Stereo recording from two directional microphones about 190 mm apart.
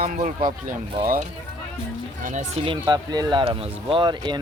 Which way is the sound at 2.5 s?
25° right (ahead or behind).